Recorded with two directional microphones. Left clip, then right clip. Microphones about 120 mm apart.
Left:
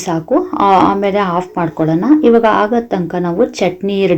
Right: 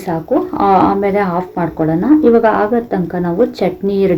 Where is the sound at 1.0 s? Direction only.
30° left (ahead or behind).